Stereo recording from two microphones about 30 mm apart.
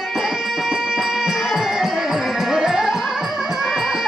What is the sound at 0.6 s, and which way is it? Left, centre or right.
Music, centre.